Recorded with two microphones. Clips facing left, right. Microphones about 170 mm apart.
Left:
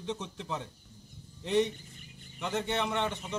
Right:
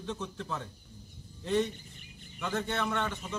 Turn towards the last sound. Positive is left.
turn(degrees=20)  # may be behind; listen again after turning